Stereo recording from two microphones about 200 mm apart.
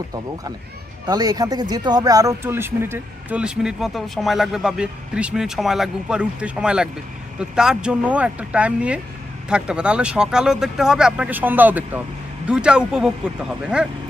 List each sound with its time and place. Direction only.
1.0 s speech: 20° right (ahead or behind)